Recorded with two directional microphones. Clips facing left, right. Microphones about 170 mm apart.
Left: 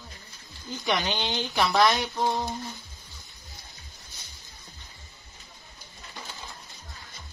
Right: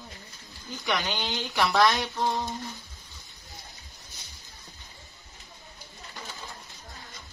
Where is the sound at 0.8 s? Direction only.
20° left (ahead or behind).